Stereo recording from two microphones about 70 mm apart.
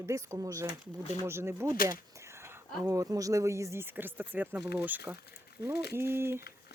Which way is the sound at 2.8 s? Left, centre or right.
Right.